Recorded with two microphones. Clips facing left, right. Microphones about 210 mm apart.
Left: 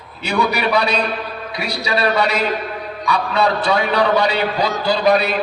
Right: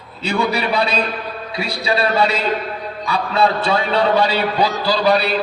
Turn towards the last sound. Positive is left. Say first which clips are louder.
# left 1 dB
turn(degrees=-35)  # may be behind; listen again after turning